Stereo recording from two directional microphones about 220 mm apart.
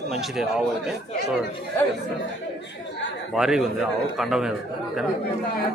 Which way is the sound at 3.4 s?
Centre (ahead or behind).